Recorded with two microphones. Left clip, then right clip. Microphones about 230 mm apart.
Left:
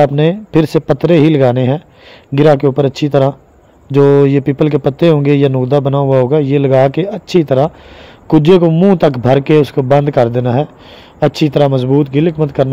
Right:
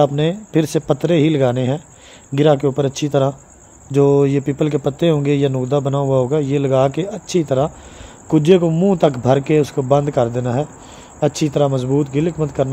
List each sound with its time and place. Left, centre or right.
0.0 s a man's voice: left